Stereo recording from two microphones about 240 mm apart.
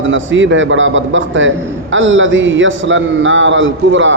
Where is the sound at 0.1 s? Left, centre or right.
Right.